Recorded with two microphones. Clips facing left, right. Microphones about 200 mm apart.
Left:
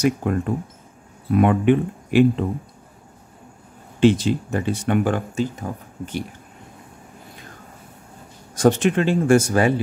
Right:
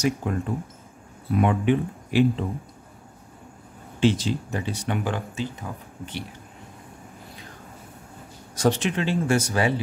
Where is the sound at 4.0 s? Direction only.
55° left (ahead or behind).